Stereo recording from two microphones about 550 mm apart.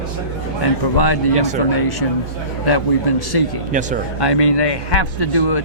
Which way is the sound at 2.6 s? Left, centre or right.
Left.